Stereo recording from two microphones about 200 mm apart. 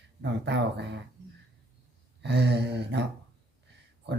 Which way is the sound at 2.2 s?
55° right (ahead or behind).